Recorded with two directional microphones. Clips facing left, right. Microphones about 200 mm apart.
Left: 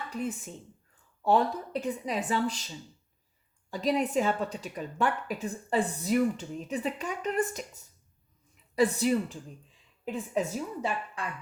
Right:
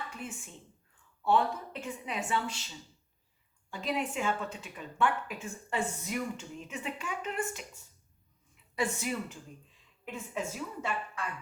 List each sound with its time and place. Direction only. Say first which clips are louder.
0.1 s a woman's voice: left 9 dB; 40° left (ahead or behind)
3.7 s a woman's voice: left 6 dB; 35° left (ahead or behind)